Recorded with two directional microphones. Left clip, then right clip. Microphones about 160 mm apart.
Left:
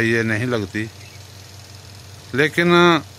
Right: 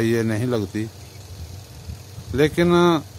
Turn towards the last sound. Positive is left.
turn(degrees=-5)  # may be behind; listen again after turning